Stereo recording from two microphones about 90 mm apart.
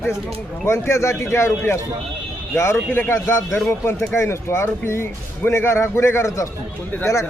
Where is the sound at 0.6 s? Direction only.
30° left (ahead or behind).